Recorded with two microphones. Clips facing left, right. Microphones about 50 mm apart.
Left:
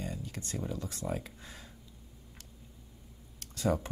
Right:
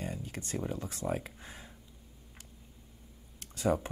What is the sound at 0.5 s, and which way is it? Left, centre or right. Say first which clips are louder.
Speech: right 2 dB; right.